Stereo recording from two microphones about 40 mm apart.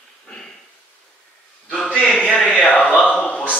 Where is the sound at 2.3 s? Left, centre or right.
Left.